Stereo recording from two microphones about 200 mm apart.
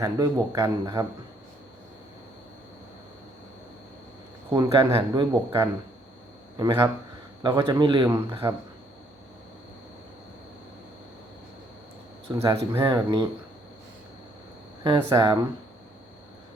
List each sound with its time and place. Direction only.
0.0 s speech: 15° right (ahead or behind)
4.5 s a man's voice: 20° right (ahead or behind)
12.3 s a man's voice: 20° right (ahead or behind)
14.8 s a man's voice: 20° right (ahead or behind)